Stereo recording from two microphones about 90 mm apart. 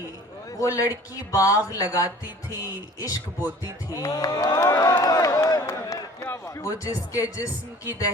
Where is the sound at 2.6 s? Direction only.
40° left (ahead or behind).